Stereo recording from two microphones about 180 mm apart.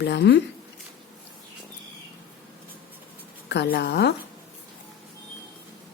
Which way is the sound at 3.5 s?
70° left (ahead or behind).